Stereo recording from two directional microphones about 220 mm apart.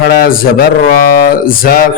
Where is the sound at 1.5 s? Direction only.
40° left (ahead or behind).